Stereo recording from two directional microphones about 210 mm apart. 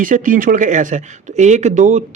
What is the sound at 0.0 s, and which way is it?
Speech, 40° right (ahead or behind).